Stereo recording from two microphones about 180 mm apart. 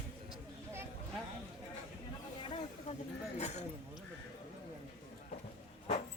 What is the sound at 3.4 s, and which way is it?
Speech, 40° left (ahead or behind).